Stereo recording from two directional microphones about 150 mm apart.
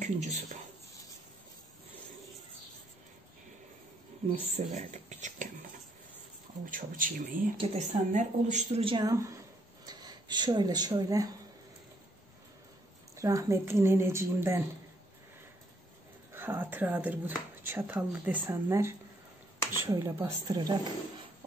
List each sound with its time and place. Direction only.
0.0 s speech: 50° right (ahead or behind)
4.6 s speech: 50° right (ahead or behind)
6.6 s speech: 65° right (ahead or behind)
7.5 s speech: 50° right (ahead or behind)
8.8 s speech: 30° right (ahead or behind)
13.1 s speech: 20° right (ahead or behind)
16.3 s speech: 15° right (ahead or behind)